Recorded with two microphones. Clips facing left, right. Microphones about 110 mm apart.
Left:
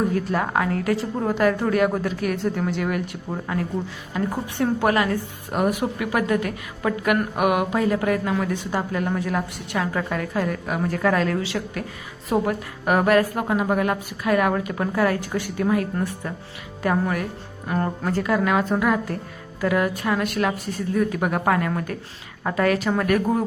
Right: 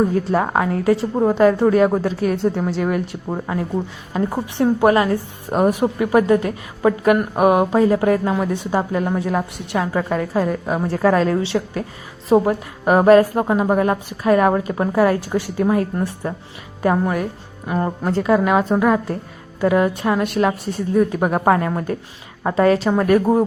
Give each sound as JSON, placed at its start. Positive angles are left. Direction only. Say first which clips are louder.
{"t": 0.1, "sound": "a woman's voice", "louder": "right 4 dB", "side_deg": -25}